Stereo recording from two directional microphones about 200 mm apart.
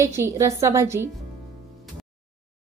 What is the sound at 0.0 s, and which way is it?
Speech, 15° right (ahead or behind).